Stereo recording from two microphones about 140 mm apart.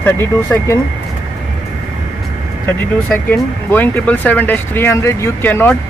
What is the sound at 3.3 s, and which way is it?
Speech, 15° left (ahead or behind).